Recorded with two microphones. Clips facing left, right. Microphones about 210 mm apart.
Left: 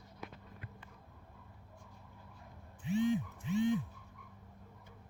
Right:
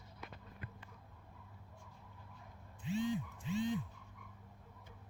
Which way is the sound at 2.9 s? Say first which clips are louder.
Left 5 dB; 15° left (ahead or behind).